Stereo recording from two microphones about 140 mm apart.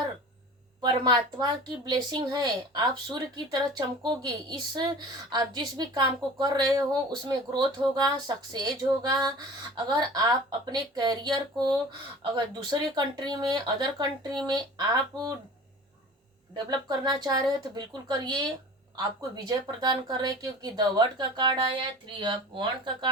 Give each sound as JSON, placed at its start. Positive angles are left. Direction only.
{"t": 0.8, "sound": "a woman's voice", "side_deg": -30}
{"t": 16.6, "sound": "a woman's voice", "side_deg": -30}